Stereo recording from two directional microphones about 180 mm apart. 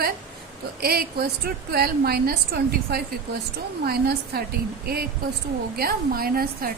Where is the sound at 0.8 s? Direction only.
60° right (ahead or behind).